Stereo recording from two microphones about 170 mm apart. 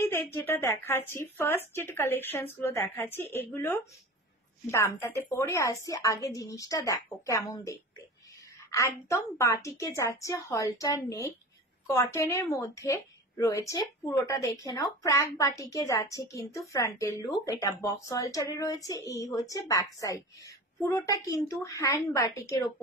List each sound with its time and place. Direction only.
0.0 s speech: 15° left (ahead or behind)
11.9 s speech: 15° left (ahead or behind)